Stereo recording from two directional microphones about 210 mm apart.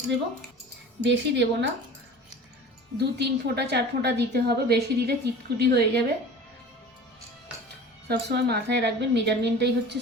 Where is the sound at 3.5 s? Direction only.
50° right (ahead or behind).